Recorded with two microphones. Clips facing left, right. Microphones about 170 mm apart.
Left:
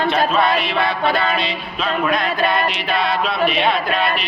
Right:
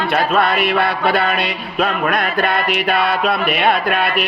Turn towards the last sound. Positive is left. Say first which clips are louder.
# right 2 dB
turn(degrees=-55)  # may be behind; listen again after turning